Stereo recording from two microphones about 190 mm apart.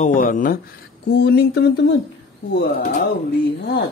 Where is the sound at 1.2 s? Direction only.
60° left (ahead or behind).